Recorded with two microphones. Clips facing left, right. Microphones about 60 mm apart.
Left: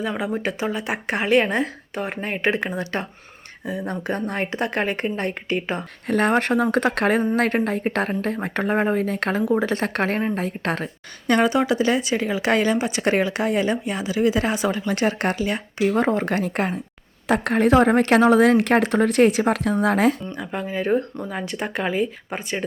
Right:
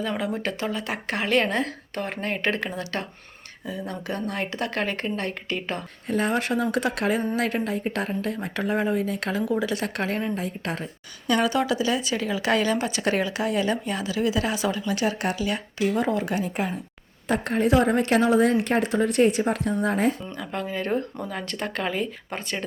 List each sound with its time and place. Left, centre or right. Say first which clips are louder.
0.0 s a woman's voice: left 2 dB; centre
6.1 s a woman's voice: left 5 dB; left
10.4 s a woman's voice: left 5 dB; left
11.4 s a woman's voice: left 4 dB; left
17.2 s a woman's voice: left 4 dB; left
20.3 s speech: left 3 dB; centre